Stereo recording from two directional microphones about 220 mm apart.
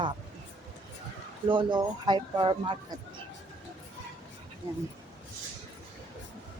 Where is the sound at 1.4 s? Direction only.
20° right (ahead or behind).